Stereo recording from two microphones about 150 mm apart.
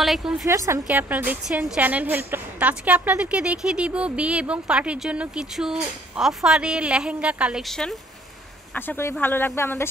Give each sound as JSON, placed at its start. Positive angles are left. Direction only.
{"t": 0.0, "sound": "a woman's voice", "side_deg": 0}
{"t": 0.5, "sound": "a woman's voice", "side_deg": -20}
{"t": 8.7, "sound": "speech", "side_deg": 15}